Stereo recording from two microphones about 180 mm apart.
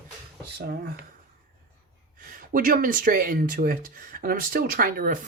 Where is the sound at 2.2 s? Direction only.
50° right (ahead or behind).